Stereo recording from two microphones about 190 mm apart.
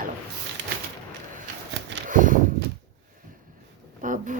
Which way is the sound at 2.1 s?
45° right (ahead or behind).